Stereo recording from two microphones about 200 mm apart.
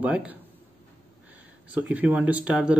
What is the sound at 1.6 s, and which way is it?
Speech, 5° right (ahead or behind).